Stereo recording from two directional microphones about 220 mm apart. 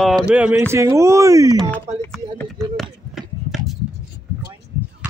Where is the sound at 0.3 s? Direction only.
5° right (ahead or behind).